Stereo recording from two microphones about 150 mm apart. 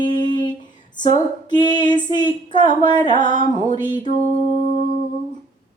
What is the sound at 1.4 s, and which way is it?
Speech, 30° left (ahead or behind).